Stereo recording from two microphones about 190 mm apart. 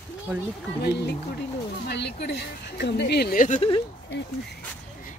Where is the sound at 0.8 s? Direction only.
60° left (ahead or behind).